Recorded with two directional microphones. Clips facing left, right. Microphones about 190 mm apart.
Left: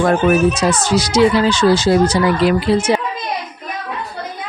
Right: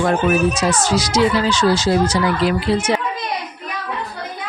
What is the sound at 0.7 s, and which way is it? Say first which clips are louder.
Speech: left 2 dB; 60° left (ahead or behind).